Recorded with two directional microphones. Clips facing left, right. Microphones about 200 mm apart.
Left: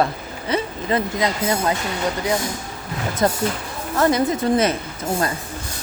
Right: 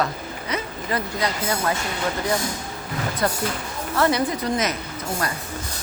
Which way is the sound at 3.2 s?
20° left (ahead or behind).